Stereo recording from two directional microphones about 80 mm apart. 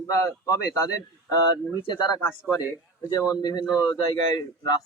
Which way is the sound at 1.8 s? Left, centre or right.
Left.